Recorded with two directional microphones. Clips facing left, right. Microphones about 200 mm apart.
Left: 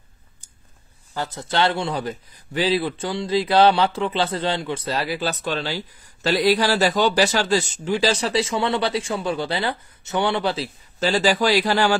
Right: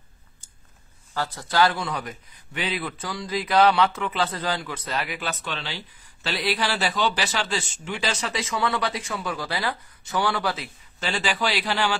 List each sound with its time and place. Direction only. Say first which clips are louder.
1.1 s a man's voice: even; 20° left (ahead or behind); by 12.0 s 40° left (ahead or behind)